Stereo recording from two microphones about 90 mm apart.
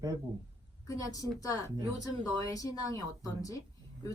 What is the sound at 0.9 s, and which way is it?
Speech, 40° left (ahead or behind).